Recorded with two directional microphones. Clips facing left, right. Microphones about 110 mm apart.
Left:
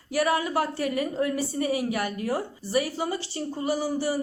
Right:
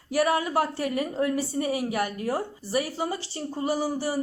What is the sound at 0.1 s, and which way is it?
Speech, 35° right (ahead or behind).